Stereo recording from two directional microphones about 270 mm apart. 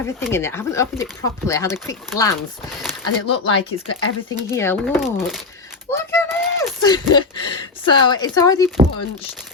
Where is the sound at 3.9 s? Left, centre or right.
Left.